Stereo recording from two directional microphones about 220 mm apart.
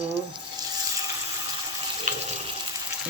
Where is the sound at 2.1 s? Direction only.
35° right (ahead or behind).